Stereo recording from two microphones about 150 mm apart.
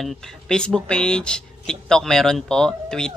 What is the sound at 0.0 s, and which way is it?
Speech, 5° left (ahead or behind).